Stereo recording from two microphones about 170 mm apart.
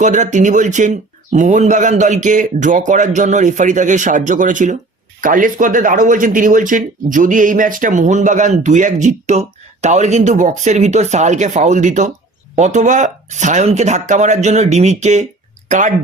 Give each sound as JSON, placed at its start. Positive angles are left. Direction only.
{"t": 0.0, "sound": "speech", "side_deg": -45}